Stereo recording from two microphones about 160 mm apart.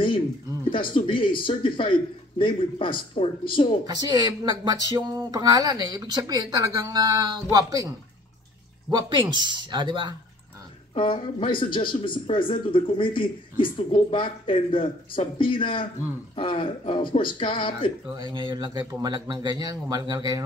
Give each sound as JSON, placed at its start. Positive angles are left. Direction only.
{"t": 0.7, "sound": "speech", "side_deg": 30}
{"t": 3.8, "sound": "speech", "side_deg": -25}
{"t": 8.9, "sound": "speech", "side_deg": -30}
{"t": 11.0, "sound": "speech", "side_deg": 30}
{"t": 18.1, "sound": "speech", "side_deg": -25}